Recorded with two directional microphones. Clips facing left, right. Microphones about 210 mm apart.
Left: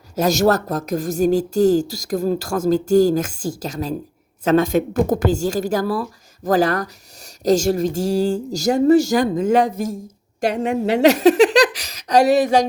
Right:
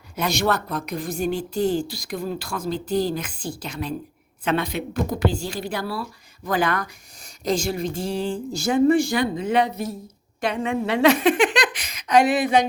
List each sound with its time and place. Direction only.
0.2 s speech: 45° left (ahead or behind)